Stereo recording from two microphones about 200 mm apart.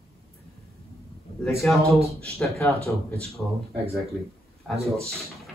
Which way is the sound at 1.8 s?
30° right (ahead or behind).